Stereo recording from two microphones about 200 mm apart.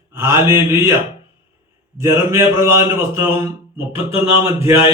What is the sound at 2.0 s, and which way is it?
Speech, 15° right (ahead or behind).